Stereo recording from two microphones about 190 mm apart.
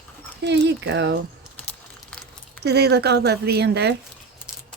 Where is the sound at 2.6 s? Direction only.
60° right (ahead or behind).